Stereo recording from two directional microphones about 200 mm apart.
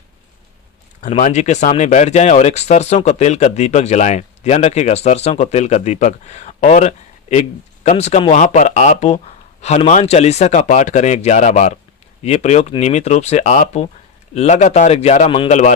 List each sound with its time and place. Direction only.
1.0 s speech: 35° left (ahead or behind)